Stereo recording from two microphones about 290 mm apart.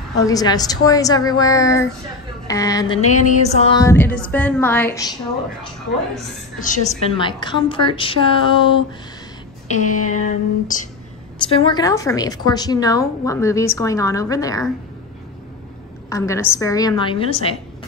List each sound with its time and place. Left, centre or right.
0.2 s a woman's voice: centre
3.3 s a woman's voice: left
6.6 s a woman's voice: left
9.7 s a sound: left
11.4 s a woman's voice: centre
16.1 s a woman's voice: centre